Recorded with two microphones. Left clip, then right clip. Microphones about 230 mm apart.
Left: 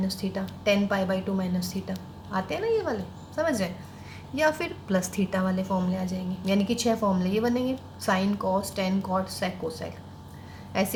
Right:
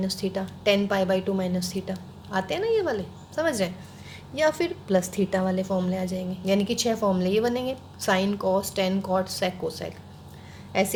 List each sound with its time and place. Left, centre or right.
0.1 s a woman's voice: right
4.4 s a woman's voice: right